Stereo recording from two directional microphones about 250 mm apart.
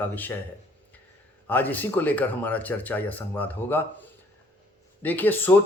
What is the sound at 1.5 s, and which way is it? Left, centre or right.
A man's voice, centre.